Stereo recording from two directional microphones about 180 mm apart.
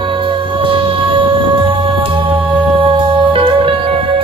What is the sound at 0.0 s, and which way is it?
Music, 30° right (ahead or behind).